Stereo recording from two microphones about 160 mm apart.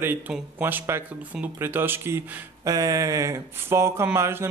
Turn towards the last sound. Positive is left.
turn(degrees=-15)  # may be behind; listen again after turning